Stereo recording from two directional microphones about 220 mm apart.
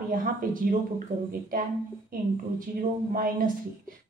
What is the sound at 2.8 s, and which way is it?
Speech, 40° right (ahead or behind).